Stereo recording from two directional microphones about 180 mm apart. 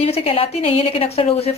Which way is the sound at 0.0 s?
30° left (ahead or behind).